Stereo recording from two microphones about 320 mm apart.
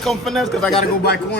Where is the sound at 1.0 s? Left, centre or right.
Left.